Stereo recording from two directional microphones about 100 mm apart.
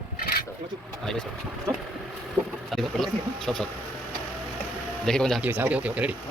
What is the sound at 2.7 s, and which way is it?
Speech, centre (ahead or behind).